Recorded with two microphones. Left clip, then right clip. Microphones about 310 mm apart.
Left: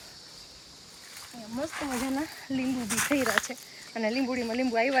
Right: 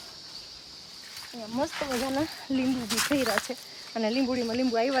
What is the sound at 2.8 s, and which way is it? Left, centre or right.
Speech, centre.